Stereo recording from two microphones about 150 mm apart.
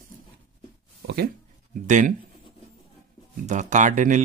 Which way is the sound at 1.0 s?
85° right.